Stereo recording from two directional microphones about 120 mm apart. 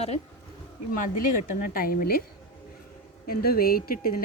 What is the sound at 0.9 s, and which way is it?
Speech, 90° left.